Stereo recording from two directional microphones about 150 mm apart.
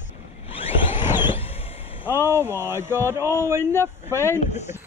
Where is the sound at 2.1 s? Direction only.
15° right (ahead or behind).